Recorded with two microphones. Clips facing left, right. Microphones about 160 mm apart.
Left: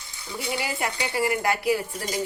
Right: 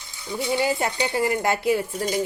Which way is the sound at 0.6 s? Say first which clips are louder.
Right 6 dB; 25° right (ahead or behind).